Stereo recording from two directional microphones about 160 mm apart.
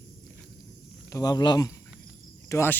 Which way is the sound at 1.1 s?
25° left (ahead or behind).